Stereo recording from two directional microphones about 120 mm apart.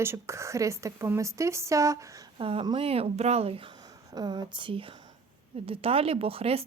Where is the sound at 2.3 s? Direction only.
45° right (ahead or behind).